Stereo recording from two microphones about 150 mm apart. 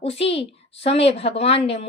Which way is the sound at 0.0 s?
40° left (ahead or behind).